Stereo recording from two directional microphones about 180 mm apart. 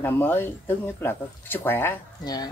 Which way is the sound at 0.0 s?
10° left (ahead or behind).